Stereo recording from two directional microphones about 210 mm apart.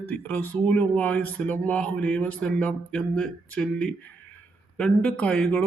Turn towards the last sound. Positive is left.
turn(degrees=5)  # may be behind; listen again after turning